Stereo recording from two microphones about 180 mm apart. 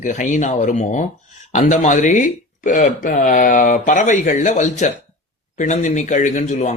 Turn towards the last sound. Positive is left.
turn(degrees=45)  # may be behind; listen again after turning